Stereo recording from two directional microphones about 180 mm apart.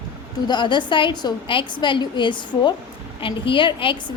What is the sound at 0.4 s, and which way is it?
A woman's voice, 25° left (ahead or behind).